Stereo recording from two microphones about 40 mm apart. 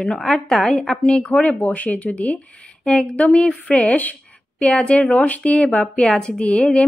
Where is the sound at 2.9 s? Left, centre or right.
Left.